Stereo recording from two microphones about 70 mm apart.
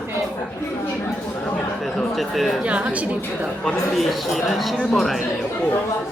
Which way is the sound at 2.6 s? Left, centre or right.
Centre.